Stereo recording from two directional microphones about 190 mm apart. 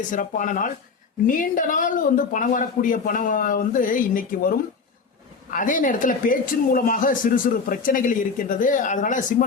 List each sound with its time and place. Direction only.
0.1 s speech: 45° left (ahead or behind)